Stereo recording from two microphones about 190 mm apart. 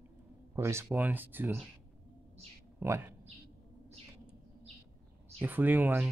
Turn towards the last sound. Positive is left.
turn(degrees=-10)  # may be behind; listen again after turning